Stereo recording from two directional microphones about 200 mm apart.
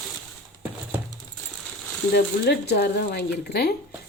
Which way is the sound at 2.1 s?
55° left (ahead or behind).